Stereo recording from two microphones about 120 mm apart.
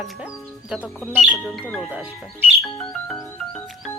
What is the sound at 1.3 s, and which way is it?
Speech, centre (ahead or behind).